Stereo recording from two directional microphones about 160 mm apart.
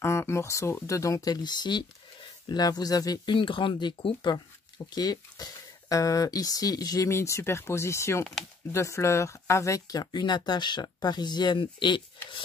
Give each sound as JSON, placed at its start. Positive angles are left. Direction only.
{"t": 0.0, "sound": "speech", "side_deg": 15}